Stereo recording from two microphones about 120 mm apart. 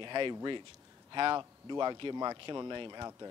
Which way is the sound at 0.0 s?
40° right (ahead or behind).